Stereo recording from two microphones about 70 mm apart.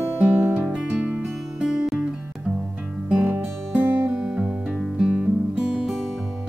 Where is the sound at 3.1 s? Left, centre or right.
Right.